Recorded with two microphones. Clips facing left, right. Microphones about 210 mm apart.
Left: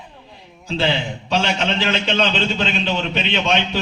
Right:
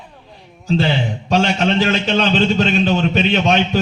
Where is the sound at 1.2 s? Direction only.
45° right (ahead or behind).